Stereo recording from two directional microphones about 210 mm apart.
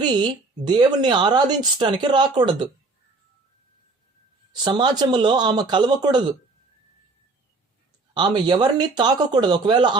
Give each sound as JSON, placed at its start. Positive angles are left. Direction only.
{"t": 0.0, "sound": "speech", "side_deg": -20}
{"t": 4.6, "sound": "speech", "side_deg": -20}
{"t": 8.1, "sound": "speech", "side_deg": -20}